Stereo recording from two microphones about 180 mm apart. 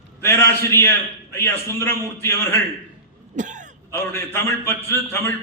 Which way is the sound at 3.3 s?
45° right (ahead or behind).